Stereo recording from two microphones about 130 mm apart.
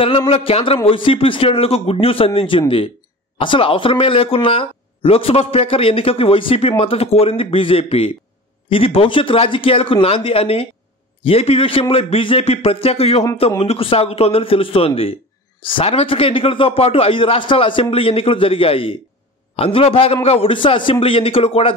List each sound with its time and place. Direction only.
0.3 s a man's voice: 45° left (ahead or behind)